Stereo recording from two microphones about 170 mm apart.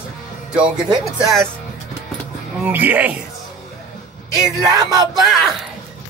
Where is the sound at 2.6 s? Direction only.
10° right (ahead or behind).